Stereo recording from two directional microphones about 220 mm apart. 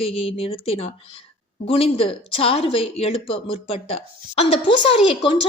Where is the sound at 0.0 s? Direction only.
25° left (ahead or behind).